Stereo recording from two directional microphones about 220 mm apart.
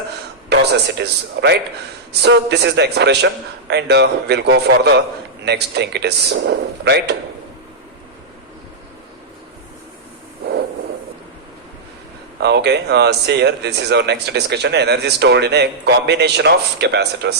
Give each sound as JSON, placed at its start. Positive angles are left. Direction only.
{"t": 0.5, "sound": "speech", "side_deg": -50}
{"t": 12.4, "sound": "speech", "side_deg": -50}